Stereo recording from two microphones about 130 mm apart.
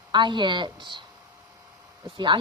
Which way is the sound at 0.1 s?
35° right (ahead or behind).